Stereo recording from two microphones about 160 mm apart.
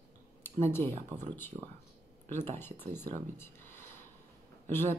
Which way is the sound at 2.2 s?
15° left (ahead or behind).